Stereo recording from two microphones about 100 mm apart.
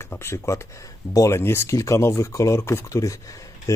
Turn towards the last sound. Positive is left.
turn(degrees=30)  # may be behind; listen again after turning